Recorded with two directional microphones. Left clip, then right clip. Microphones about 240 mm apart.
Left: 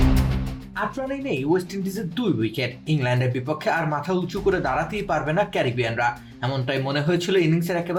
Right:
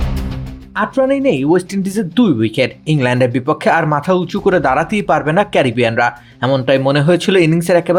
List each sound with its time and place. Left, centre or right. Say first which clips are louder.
0.8 s speech: right 13 dB; right